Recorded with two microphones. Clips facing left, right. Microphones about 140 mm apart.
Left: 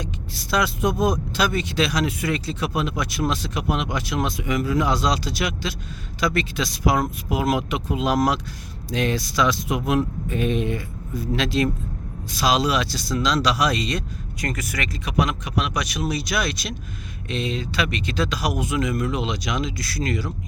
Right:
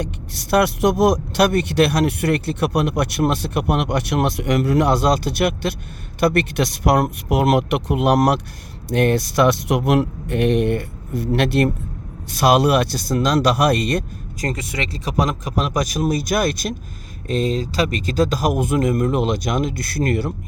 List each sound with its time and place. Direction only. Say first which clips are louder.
0.5 s speech: right 6 dB; 70° right (ahead or behind); by 14.0 s 55° right (ahead or behind)
14.4 s speech: right 3 dB; 30° right (ahead or behind); by 20.3 s 55° right (ahead or behind)